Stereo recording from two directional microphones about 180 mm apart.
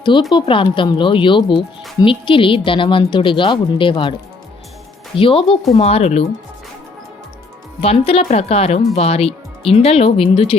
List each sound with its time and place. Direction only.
0.3 s speech: 30° left (ahead or behind)
5.1 s speech: 30° left (ahead or behind)
7.8 s speech: 35° left (ahead or behind)